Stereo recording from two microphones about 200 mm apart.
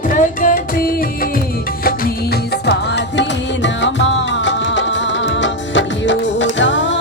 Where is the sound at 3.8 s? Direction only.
65° left (ahead or behind).